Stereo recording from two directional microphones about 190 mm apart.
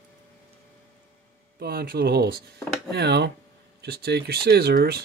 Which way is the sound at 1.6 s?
55° right (ahead or behind).